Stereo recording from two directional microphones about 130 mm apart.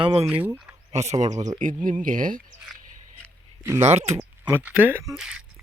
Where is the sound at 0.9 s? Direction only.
55° right (ahead or behind).